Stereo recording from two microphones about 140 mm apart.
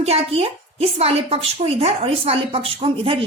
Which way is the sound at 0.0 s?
45° right (ahead or behind).